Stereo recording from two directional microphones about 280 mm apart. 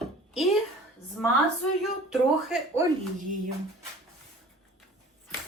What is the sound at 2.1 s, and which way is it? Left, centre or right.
Speech, centre.